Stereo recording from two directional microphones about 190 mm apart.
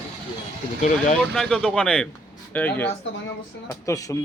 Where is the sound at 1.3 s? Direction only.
5° left (ahead or behind).